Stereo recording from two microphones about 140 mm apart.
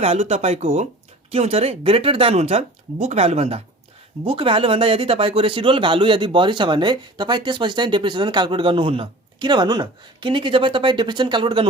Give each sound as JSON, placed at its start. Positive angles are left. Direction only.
{"t": 0.0, "sound": "speech", "side_deg": -50}